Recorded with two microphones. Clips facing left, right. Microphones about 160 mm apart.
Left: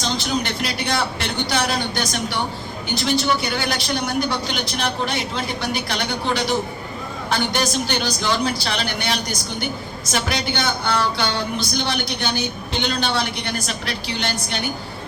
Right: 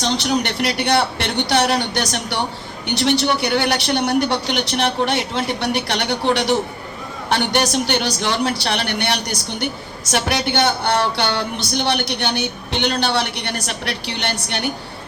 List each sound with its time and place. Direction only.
0.0 s speech: 70° right (ahead or behind)